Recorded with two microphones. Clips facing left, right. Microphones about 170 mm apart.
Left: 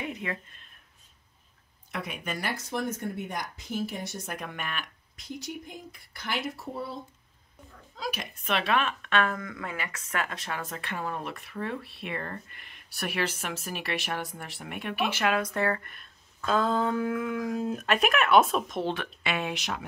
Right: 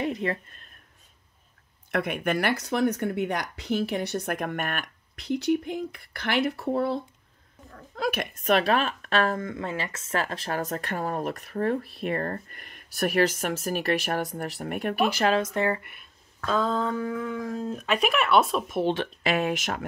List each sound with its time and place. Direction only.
0.0 s speech: 35° right (ahead or behind)
1.9 s speech: 60° right (ahead or behind)
5.1 s speech: 70° right (ahead or behind); by 16.1 s 10° right (ahead or behind)
16.4 s speech: 5° left (ahead or behind)
18.8 s speech: 20° right (ahead or behind)
19.2 s speech: 45° right (ahead or behind)